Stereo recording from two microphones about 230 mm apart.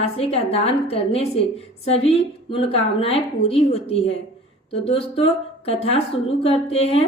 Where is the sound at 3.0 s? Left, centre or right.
Left.